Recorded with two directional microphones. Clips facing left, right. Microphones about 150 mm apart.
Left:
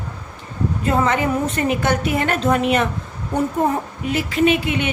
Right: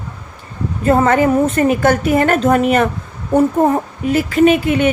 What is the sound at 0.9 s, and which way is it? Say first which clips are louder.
A woman's voice: right 7 dB; 50° right (ahead or behind).